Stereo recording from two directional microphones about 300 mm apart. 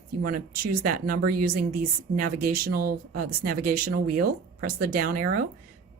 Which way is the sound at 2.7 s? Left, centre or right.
Right.